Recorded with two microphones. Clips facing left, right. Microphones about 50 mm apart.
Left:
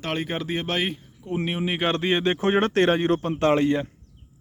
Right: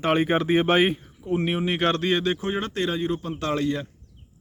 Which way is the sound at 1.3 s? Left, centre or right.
Centre.